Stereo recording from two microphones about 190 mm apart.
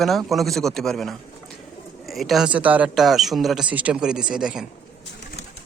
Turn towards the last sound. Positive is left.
turn(degrees=-5)  # may be behind; listen again after turning